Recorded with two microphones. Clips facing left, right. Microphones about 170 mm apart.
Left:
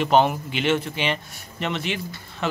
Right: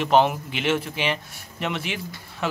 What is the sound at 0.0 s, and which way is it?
Speech, centre (ahead or behind).